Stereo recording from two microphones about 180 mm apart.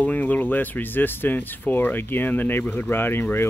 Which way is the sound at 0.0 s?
10° left (ahead or behind).